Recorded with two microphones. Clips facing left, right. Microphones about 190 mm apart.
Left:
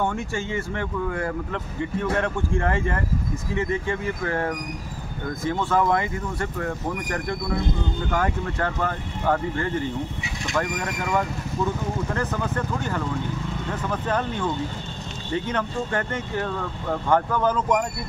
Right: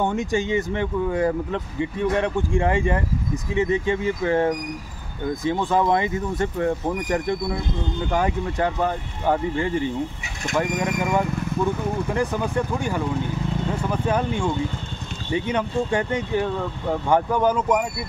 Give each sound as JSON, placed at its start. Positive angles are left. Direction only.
{"t": 0.0, "sound": "speech", "side_deg": -20}